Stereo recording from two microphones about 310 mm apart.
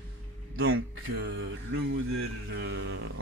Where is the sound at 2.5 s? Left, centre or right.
Right.